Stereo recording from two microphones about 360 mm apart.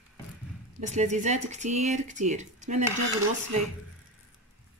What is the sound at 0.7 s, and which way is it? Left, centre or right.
Speech, centre.